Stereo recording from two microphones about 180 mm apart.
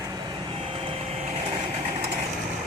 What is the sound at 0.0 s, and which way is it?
Vehicle, 20° right (ahead or behind).